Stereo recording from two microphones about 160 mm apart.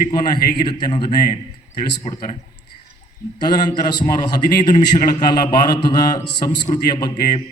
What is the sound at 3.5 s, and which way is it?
A man's voice, 25° left (ahead or behind).